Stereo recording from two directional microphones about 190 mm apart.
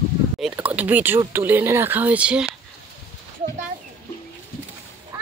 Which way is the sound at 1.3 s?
10° right (ahead or behind).